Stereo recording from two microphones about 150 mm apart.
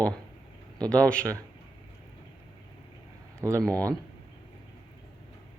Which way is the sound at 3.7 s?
20° right (ahead or behind).